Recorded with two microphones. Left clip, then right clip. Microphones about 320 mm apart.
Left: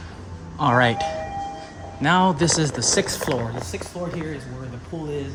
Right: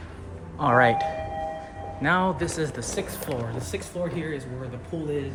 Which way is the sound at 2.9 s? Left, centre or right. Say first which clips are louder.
Left 9 dB; left.